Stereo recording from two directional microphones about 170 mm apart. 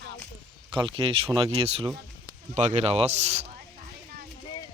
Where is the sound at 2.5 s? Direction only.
45° right (ahead or behind).